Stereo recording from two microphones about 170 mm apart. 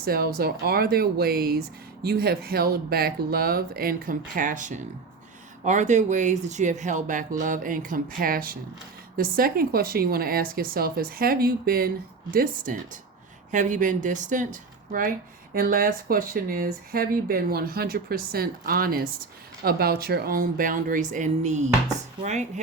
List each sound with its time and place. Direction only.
0.0 s speech: 60° right (ahead or behind); by 22.6 s 45° right (ahead or behind)